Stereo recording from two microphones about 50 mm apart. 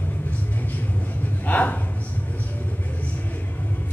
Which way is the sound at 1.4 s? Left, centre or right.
Left.